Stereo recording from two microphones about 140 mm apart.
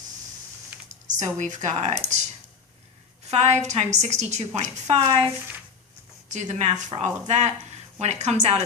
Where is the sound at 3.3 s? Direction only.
50° right (ahead or behind).